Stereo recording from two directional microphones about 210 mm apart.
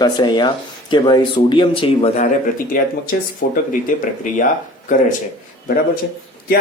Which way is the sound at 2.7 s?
40° left (ahead or behind).